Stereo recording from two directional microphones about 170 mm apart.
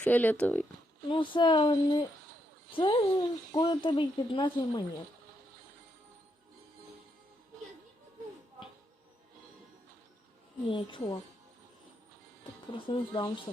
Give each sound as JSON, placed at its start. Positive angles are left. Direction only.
{"t": 0.0, "sound": "speech", "side_deg": 10}
{"t": 1.1, "sound": "speech", "side_deg": 30}
{"t": 10.7, "sound": "speech", "side_deg": 25}
{"t": 12.7, "sound": "speech", "side_deg": 25}